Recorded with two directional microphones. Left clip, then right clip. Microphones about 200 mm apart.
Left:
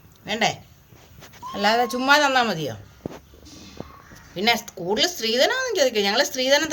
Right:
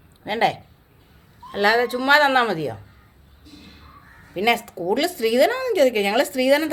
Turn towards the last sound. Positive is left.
turn(degrees=-25)  # may be behind; listen again after turning